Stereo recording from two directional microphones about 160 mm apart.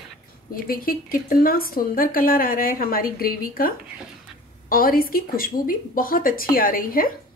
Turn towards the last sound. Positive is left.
turn(degrees=65)  # may be behind; listen again after turning